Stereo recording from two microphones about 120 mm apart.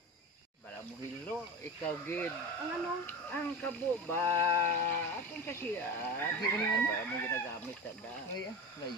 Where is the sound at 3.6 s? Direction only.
15° left (ahead or behind).